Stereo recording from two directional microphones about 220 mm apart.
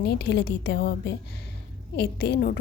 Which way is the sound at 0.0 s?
50° left (ahead or behind).